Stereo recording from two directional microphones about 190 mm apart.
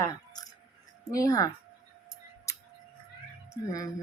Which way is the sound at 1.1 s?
20° left (ahead or behind).